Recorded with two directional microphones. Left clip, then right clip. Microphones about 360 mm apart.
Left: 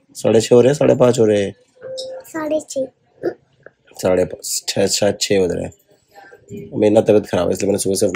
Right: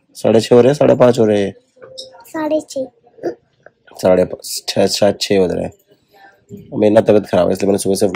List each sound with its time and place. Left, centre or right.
0.1 s a child's voice: centre